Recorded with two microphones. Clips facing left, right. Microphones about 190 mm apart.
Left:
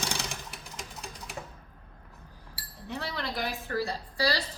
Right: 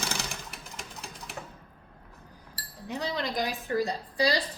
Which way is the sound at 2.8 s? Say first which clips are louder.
Right 3 dB; 20° right (ahead or behind).